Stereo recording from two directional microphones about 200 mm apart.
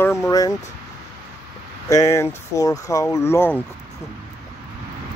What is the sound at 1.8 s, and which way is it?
Speech, 15° left (ahead or behind).